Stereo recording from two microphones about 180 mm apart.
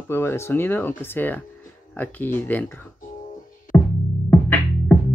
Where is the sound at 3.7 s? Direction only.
10° left (ahead or behind).